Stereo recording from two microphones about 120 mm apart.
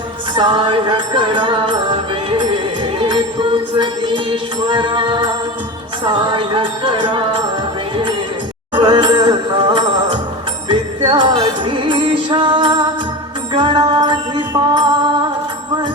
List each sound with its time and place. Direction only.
0.3 s music: 40° right (ahead or behind)
6.3 s music: 45° right (ahead or behind)
8.7 s music: 40° right (ahead or behind)